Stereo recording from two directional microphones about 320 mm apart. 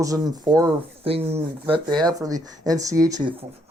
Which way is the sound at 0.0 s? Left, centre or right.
Centre.